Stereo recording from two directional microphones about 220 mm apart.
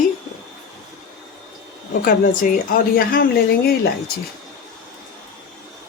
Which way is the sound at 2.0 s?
40° left (ahead or behind).